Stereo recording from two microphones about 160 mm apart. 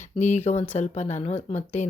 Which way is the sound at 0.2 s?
45° left (ahead or behind).